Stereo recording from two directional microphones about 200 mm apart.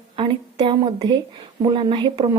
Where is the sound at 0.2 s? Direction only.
25° right (ahead or behind).